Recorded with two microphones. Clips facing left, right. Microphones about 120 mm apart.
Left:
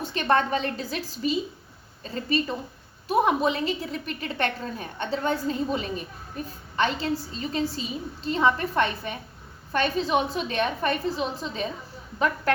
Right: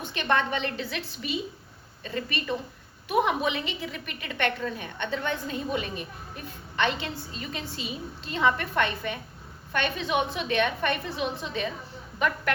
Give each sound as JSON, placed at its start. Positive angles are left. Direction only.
{"t": 0.0, "sound": "a woman's voice", "side_deg": 35}